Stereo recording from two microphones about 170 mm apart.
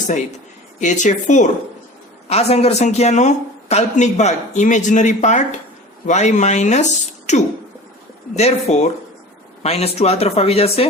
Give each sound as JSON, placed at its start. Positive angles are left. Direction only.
{"t": 0.8, "sound": "speech", "side_deg": 45}